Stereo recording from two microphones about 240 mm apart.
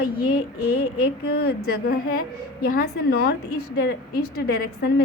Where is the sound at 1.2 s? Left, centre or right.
Left.